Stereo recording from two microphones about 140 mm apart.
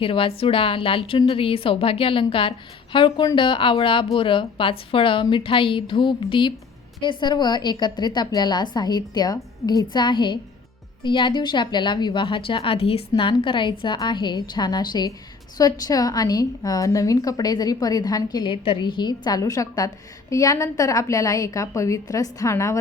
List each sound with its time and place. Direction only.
0.0 s a woman's voice: 40° left (ahead or behind); by 22.8 s 20° left (ahead or behind)